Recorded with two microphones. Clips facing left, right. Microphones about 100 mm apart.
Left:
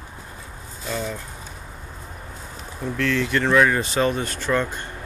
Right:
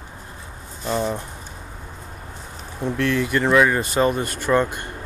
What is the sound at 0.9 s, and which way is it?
Speech, 25° right (ahead or behind).